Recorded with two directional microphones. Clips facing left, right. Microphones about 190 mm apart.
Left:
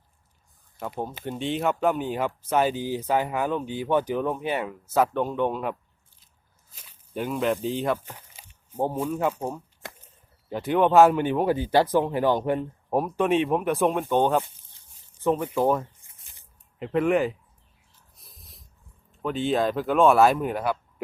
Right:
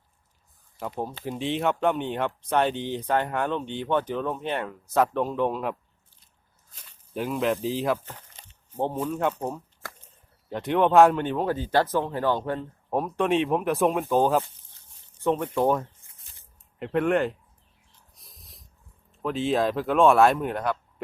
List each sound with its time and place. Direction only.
0.8 s speech: centre (ahead or behind)
8.0 s speech: 10° left (ahead or behind)
9.8 s a sound: 20° left (ahead or behind)
10.5 s speech: centre (ahead or behind)
16.0 s shuffling cards: 15° left (ahead or behind)
16.8 s speech: centre (ahead or behind)
18.2 s dog: centre (ahead or behind)
19.1 s speech: centre (ahead or behind)